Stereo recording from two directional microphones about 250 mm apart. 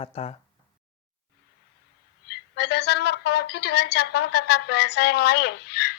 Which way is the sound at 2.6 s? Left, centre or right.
Left.